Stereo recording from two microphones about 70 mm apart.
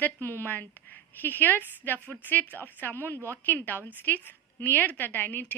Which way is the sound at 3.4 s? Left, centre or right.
Left.